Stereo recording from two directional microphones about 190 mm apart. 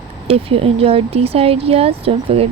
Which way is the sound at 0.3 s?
30° right (ahead or behind).